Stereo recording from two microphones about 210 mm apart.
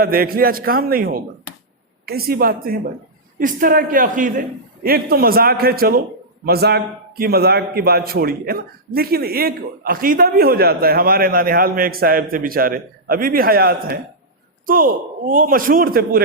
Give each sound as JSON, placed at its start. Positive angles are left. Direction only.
{"t": 0.0, "sound": "a man's voice", "side_deg": -45}